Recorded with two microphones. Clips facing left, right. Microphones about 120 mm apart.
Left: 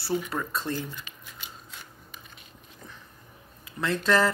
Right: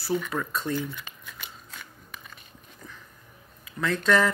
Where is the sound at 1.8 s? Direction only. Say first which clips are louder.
Right 2 dB; 65° right (ahead or behind).